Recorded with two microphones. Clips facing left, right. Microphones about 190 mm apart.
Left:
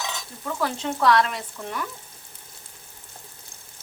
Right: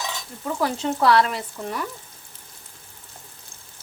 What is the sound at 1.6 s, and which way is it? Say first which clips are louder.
Speech: right 4 dB; 15° right (ahead or behind).